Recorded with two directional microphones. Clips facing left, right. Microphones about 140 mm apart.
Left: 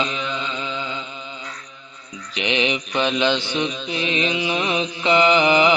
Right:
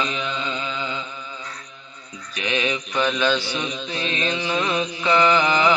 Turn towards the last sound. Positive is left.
turn(degrees=20)  # may be behind; listen again after turning